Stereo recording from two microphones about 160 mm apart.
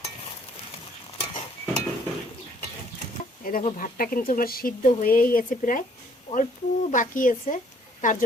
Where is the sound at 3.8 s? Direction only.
60° left (ahead or behind).